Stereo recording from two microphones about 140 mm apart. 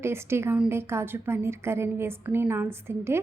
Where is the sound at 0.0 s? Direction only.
20° right (ahead or behind).